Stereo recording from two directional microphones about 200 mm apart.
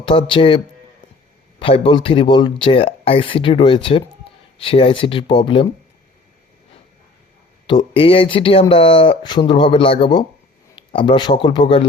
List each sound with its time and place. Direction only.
0.0 s speech: 25° left (ahead or behind)
7.7 s speech: 25° left (ahead or behind)